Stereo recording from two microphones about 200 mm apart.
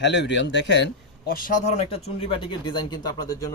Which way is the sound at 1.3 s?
45° left (ahead or behind).